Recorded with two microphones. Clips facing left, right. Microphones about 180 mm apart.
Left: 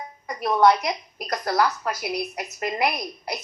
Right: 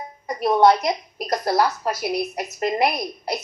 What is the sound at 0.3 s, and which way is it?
A woman's voice, 25° right (ahead or behind).